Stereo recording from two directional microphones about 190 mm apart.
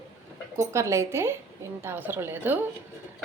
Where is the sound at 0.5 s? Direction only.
15° right (ahead or behind).